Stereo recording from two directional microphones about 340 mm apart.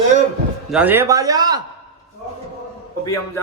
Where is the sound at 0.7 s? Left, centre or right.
Centre.